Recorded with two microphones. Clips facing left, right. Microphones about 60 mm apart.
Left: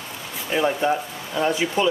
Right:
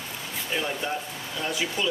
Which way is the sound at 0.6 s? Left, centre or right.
Left.